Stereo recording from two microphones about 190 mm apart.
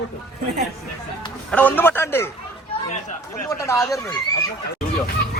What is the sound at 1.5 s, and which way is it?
Speech, 10° left (ahead or behind).